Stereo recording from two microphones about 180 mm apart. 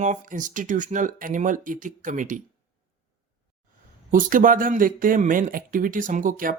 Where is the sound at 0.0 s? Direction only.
45° right (ahead or behind).